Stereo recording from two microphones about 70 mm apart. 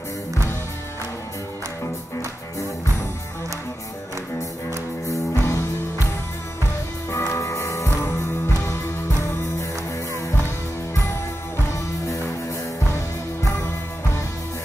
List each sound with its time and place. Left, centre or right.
5.0 s music: left
7.1 s music: left
12.8 s music: left